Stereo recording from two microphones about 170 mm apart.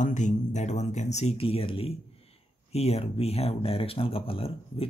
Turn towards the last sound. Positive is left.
turn(degrees=35)  # may be behind; listen again after turning